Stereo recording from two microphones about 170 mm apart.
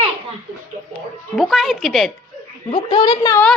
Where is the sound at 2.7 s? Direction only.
25° left (ahead or behind).